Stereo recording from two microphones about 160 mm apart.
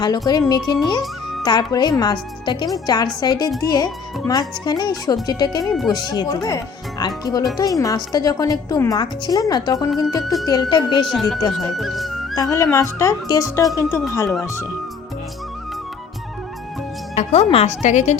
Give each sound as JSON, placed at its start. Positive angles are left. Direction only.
{"t": 0.0, "sound": "speech", "side_deg": 25}
{"t": 11.1, "sound": "speech", "side_deg": 0}
{"t": 12.3, "sound": "speech", "side_deg": 20}
{"t": 17.2, "sound": "speech", "side_deg": 40}